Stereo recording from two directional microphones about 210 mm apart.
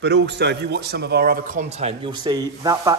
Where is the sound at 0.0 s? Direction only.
55° right (ahead or behind).